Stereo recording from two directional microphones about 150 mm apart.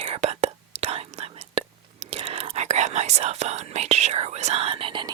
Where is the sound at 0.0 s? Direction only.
45° right (ahead or behind).